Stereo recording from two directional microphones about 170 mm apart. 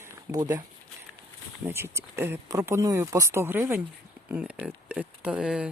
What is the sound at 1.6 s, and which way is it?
Speech, 15° right (ahead or behind).